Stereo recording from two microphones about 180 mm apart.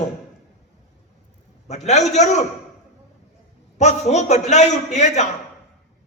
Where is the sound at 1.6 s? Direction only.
40° left (ahead or behind).